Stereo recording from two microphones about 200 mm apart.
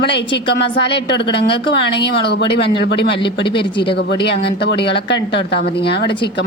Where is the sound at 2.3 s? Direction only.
60° left (ahead or behind).